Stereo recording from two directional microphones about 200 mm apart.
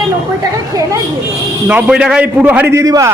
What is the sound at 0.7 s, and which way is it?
Speech, 15° right (ahead or behind).